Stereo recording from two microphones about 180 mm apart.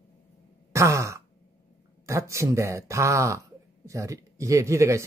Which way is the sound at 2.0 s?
15° right (ahead or behind).